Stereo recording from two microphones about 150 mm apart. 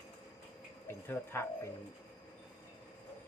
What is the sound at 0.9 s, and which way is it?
Speech, 15° left (ahead or behind).